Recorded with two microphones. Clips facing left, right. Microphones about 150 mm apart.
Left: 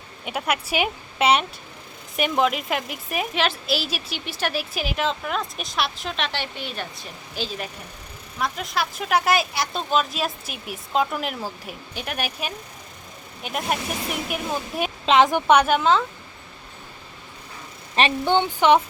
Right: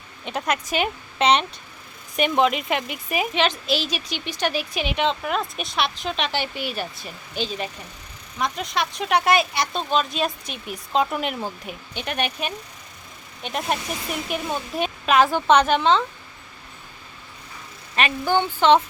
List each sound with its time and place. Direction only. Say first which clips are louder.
0.3 s a woman's voice: even; 10° left (ahead or behind)
15.0 s speech: left 1 dB; 20° left (ahead or behind); by 16.0 s 5° left (ahead or behind)
17.9 s speech: left 1 dB; 25° left (ahead or behind)